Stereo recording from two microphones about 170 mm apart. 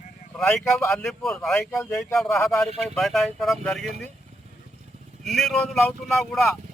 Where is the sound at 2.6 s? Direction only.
5° left (ahead or behind).